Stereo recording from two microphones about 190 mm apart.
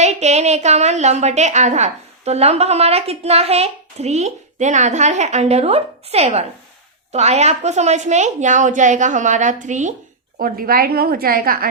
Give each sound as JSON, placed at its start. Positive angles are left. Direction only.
{"t": 0.0, "sound": "a woman's voice", "side_deg": -35}
{"t": 10.3, "sound": "a woman's voice", "side_deg": -50}